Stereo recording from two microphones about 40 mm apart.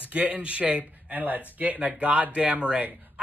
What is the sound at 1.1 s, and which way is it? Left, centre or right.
Speech, right.